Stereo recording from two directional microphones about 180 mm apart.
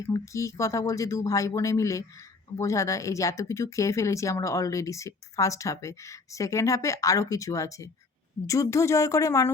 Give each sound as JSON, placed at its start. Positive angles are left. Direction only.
{"t": 0.0, "sound": "speech", "side_deg": 15}